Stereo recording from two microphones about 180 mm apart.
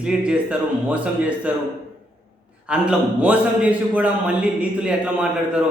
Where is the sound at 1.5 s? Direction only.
5° right (ahead or behind).